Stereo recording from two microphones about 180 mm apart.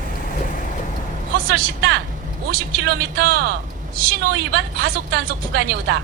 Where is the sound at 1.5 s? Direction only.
55° right (ahead or behind).